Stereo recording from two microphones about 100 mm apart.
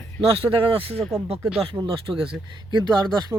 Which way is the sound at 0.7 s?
70° right (ahead or behind).